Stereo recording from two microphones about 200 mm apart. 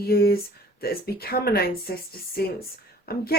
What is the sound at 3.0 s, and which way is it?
Speech, 50° left (ahead or behind).